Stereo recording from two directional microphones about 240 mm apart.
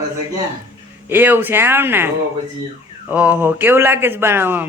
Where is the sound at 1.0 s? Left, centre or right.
Centre.